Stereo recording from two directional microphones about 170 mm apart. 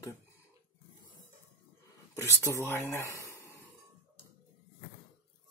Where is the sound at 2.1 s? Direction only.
15° left (ahead or behind).